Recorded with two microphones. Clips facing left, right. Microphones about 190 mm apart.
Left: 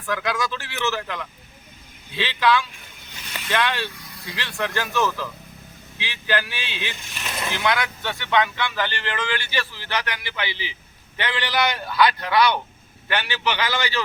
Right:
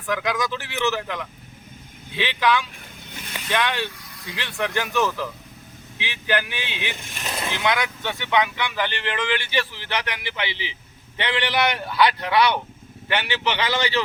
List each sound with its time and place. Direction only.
0.0 s speech: 15° right (ahead or behind)